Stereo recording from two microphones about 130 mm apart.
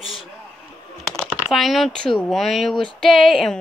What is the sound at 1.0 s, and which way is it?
Speech, centre (ahead or behind).